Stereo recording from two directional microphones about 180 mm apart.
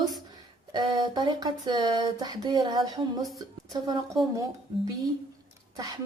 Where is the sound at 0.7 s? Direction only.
25° right (ahead or behind).